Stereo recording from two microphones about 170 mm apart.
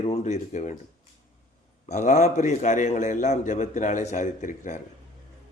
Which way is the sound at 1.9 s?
45° left (ahead or behind).